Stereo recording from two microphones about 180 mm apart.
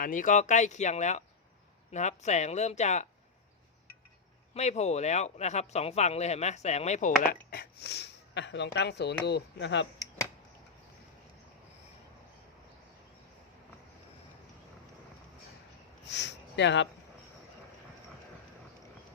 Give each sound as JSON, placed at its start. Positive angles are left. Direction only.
{"t": 0.0, "sound": "speech", "side_deg": 45}
{"t": 4.5, "sound": "speech", "side_deg": 40}
{"t": 7.5, "sound": "speech", "side_deg": 60}
{"t": 16.0, "sound": "speech", "side_deg": 75}